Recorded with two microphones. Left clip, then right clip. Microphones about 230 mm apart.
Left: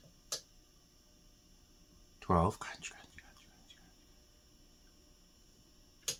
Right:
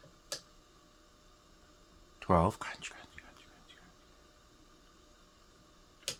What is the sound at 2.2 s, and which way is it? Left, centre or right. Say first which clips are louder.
Speech: right 3 dB; right.